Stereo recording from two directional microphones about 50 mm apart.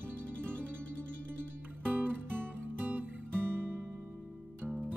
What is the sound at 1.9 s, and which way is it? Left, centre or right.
Music, right.